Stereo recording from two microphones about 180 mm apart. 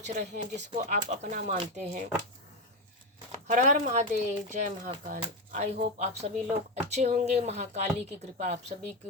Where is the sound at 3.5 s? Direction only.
45° right (ahead or behind).